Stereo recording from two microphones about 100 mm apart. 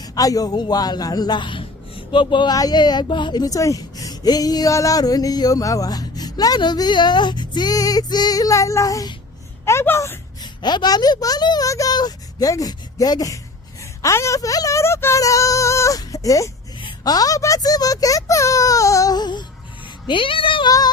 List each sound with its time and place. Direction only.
0.0 s a man's voice: 35° left (ahead or behind)
10.4 s speech: 45° left (ahead or behind)
20.1 s speech: 60° left (ahead or behind)
20.7 s a sound: 40° left (ahead or behind)